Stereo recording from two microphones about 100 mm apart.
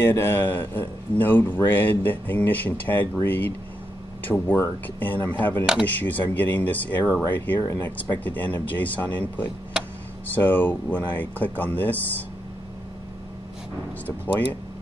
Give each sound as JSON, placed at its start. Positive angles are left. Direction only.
{"t": 0.0, "sound": "a man's voice", "side_deg": 20}